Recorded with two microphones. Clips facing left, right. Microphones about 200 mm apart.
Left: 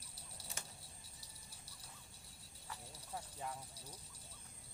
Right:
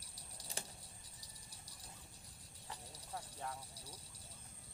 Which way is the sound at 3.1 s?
10° left (ahead or behind).